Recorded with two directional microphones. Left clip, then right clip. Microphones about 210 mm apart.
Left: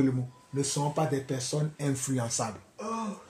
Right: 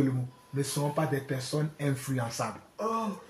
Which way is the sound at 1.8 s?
45° left (ahead or behind).